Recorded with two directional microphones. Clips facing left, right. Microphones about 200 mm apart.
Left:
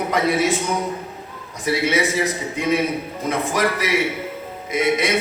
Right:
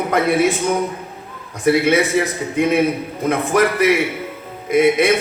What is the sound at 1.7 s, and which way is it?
A man's voice, 55° right (ahead or behind).